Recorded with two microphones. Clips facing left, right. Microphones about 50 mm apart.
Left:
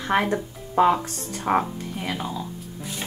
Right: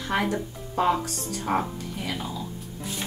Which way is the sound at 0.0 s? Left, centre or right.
Left.